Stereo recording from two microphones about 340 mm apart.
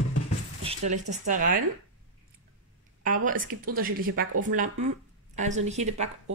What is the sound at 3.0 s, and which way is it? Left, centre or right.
Speech, right.